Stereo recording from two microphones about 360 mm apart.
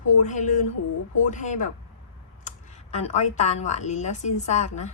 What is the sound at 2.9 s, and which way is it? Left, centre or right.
A woman's voice, centre.